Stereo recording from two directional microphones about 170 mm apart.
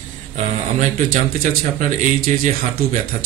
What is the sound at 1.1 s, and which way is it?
A man's voice, 50° right (ahead or behind).